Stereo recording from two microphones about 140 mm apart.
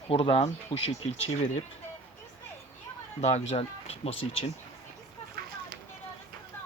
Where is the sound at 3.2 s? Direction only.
50° left (ahead or behind).